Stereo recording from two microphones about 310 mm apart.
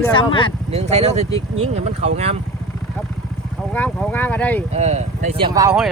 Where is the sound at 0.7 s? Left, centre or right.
Right.